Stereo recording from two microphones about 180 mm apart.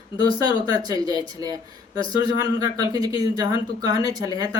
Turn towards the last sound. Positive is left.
turn(degrees=-20)  # may be behind; listen again after turning